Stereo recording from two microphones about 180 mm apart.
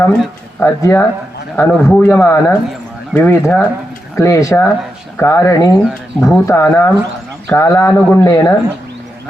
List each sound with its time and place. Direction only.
0.6 s speech: 15° left (ahead or behind)